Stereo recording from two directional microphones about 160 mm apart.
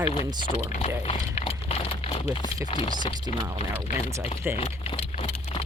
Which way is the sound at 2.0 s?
30° left (ahead or behind).